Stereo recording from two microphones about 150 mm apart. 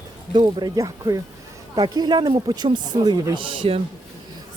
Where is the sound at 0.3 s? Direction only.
30° right (ahead or behind).